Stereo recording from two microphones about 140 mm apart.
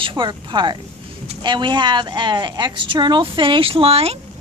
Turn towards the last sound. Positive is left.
turn(degrees=-45)  # may be behind; listen again after turning